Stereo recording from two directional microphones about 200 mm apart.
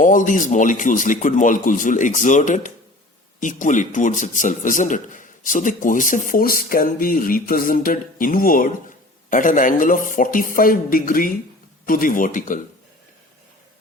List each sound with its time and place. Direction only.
0.0 s a man's voice: 40° left (ahead or behind)